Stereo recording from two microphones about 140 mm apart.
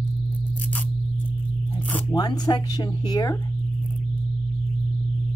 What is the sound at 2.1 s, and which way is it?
Speech, 30° left (ahead or behind).